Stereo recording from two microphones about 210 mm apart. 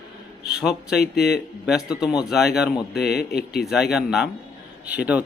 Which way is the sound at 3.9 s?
Centre (ahead or behind).